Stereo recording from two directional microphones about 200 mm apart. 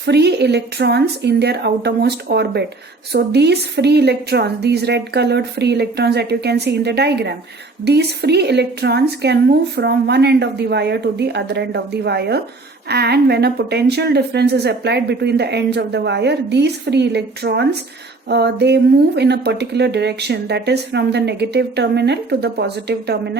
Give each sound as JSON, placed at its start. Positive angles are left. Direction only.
{"t": 0.0, "sound": "speech", "side_deg": -55}